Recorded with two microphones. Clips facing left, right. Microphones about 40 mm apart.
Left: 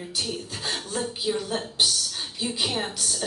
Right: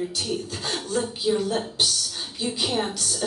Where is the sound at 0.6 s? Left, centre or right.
Centre.